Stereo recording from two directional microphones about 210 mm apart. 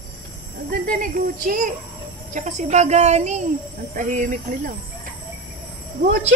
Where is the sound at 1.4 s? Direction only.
40° right (ahead or behind).